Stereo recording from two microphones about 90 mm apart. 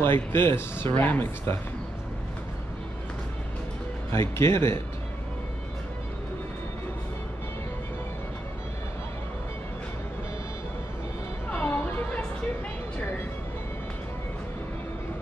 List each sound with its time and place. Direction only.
0.0 s speech: 25° left (ahead or behind)
4.1 s speech: 30° left (ahead or behind)
11.5 s music: 25° left (ahead or behind)